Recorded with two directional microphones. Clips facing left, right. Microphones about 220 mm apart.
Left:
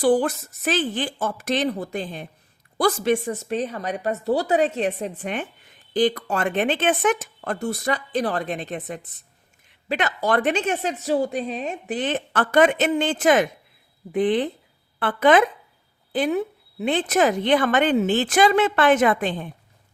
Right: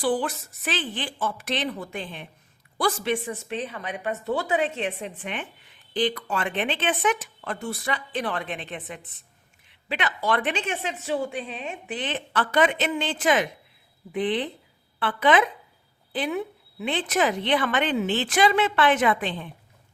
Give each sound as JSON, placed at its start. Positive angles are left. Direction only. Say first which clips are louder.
{"t": 0.0, "sound": "a woman's voice", "louder": "left 6 dB", "side_deg": 45}